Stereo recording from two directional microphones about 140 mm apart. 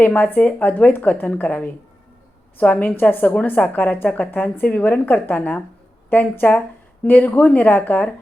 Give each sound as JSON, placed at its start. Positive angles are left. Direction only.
{"t": 0.0, "sound": "a woman's voice", "side_deg": 15}